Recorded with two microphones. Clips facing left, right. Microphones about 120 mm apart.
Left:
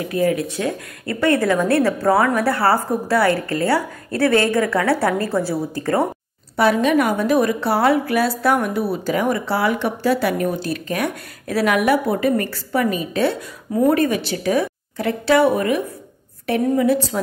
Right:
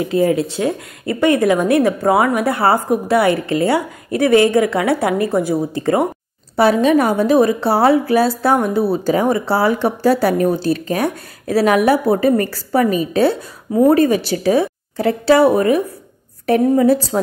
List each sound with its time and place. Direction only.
0.0 s a woman's voice: 25° right (ahead or behind)
6.5 s a woman's voice: 30° right (ahead or behind)